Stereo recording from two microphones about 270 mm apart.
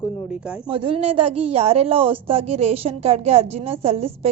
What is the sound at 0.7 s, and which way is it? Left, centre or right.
A woman's voice, centre.